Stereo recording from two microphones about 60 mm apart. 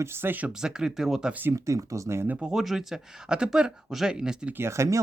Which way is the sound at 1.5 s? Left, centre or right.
Right.